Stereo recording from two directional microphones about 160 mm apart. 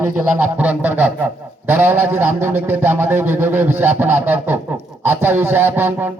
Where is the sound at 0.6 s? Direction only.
10° right (ahead or behind).